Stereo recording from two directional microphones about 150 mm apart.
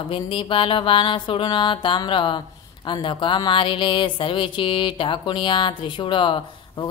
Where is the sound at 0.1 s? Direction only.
35° left (ahead or behind).